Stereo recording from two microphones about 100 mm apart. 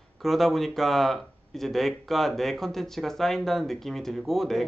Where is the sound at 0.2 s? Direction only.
Centre (ahead or behind).